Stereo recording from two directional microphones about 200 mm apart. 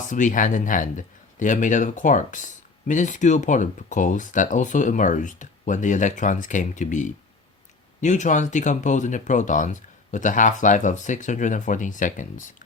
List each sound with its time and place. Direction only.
0.1 s speech: 40° left (ahead or behind)